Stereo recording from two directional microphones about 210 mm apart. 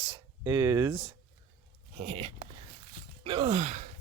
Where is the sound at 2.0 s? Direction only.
30° right (ahead or behind).